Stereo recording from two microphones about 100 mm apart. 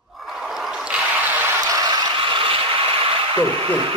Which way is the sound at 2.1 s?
60° right (ahead or behind).